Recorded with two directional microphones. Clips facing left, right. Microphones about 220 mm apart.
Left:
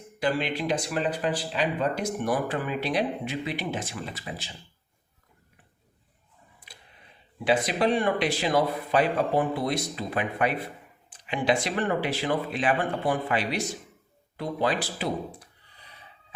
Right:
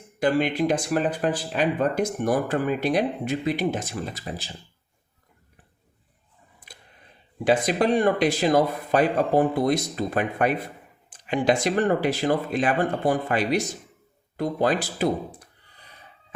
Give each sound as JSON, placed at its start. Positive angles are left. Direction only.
{"t": 0.2, "sound": "speech", "side_deg": -45}
{"t": 6.7, "sound": "a sound", "side_deg": -50}
{"t": 7.4, "sound": "speech", "side_deg": -45}